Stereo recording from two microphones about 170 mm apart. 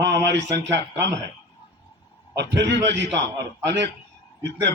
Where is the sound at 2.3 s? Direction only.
90° right.